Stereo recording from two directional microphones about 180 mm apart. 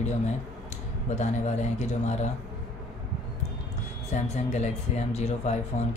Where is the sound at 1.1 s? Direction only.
40° left (ahead or behind).